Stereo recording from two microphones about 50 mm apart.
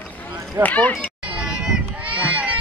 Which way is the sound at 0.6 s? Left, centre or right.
Left.